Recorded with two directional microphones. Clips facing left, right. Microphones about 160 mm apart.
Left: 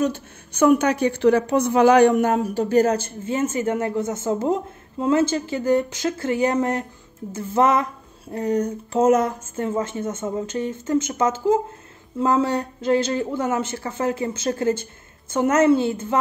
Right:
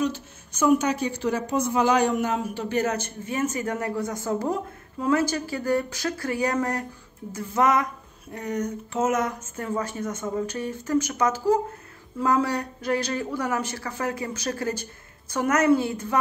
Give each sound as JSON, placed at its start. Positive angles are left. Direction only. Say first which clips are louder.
{"t": 0.0, "sound": "a woman's voice", "louder": "left 4 dB", "side_deg": 55}